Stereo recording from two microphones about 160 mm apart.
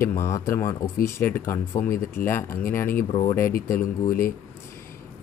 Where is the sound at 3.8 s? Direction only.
60° left (ahead or behind).